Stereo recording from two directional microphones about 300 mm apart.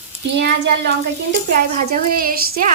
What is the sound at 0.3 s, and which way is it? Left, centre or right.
A woman's voice, right.